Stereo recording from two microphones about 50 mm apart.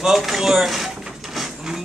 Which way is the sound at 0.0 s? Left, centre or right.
Centre.